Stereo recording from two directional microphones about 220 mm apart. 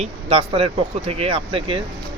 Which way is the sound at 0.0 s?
25° right (ahead or behind).